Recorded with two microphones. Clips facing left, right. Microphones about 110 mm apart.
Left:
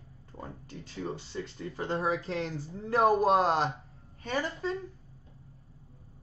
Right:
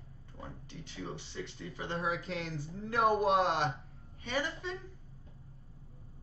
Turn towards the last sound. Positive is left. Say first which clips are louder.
# left 4 dB
turn(degrees=40)  # may be behind; listen again after turning